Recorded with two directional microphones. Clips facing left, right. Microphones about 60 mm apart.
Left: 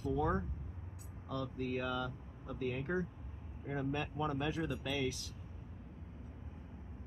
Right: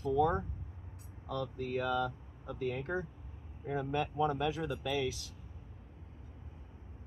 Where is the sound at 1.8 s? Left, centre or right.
Right.